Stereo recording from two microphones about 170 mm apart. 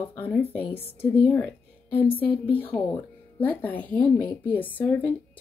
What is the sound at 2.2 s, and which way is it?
Speech, 10° left (ahead or behind).